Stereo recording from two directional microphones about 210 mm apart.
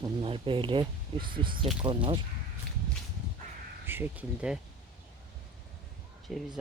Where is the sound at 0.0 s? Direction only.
25° right (ahead or behind).